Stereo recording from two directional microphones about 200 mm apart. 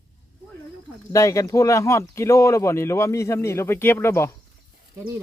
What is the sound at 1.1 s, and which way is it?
Speech, 15° left (ahead or behind).